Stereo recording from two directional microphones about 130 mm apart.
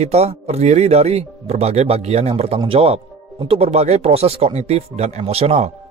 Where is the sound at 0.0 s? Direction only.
55° right (ahead or behind).